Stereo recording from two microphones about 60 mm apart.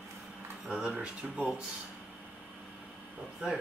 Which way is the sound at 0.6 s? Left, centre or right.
Centre.